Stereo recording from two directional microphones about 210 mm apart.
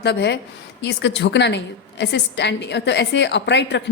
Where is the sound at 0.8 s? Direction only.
55° left (ahead or behind).